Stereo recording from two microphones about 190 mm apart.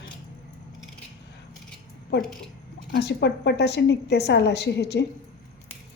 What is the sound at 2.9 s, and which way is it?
A woman's voice, 60° left (ahead or behind).